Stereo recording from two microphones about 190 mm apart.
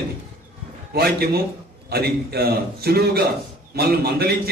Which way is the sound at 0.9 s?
55° right (ahead or behind).